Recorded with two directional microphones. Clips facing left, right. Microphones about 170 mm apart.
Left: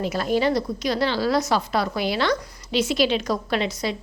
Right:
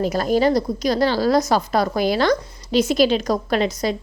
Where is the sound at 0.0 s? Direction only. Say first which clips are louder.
Right 4 dB; 40° right (ahead or behind).